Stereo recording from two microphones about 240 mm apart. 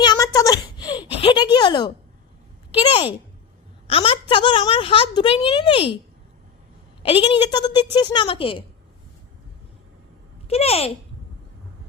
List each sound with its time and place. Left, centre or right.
0.0 s a sound: centre
2.8 s a woman's voice: left
7.0 s a woman's voice: left
10.5 s a woman's voice: left